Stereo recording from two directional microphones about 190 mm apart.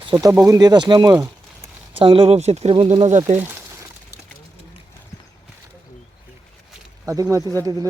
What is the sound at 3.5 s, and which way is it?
Pour, 15° right (ahead or behind).